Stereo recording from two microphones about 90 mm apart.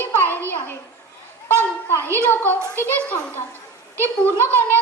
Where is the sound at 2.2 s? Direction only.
20° left (ahead or behind).